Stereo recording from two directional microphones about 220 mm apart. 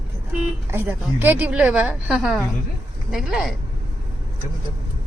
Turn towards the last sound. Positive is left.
turn(degrees=0)  # may be behind; listen again after turning